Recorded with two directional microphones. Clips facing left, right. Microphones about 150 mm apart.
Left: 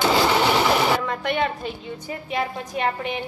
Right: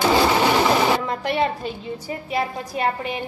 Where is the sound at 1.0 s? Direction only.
35° right (ahead or behind).